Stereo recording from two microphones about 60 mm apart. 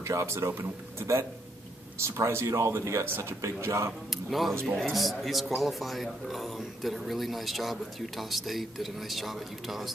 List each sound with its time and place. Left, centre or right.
0.0 s speech: right
0.5 s speech: right
2.0 s speech: right
3.3 s speech: right
4.1 s speech: centre